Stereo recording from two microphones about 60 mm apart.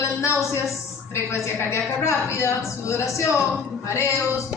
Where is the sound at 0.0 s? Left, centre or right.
Left.